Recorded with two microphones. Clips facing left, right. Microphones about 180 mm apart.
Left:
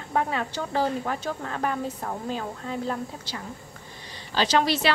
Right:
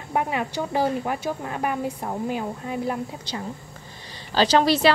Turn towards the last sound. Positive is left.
turn(degrees=-35)  # may be behind; listen again after turning